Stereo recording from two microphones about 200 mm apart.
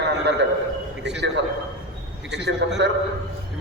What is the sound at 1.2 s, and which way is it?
A man's voice, 60° right (ahead or behind).